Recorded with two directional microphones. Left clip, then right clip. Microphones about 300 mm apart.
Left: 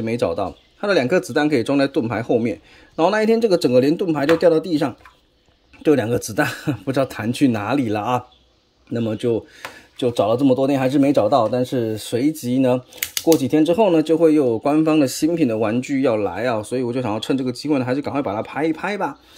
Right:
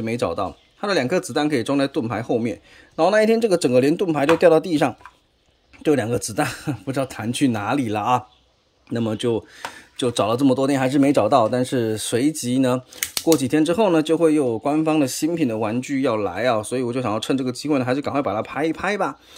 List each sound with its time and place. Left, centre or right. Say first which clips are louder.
0.0 s speech: left 2 dB; centre